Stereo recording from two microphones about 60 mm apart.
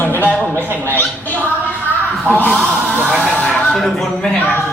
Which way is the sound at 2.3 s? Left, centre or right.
Left.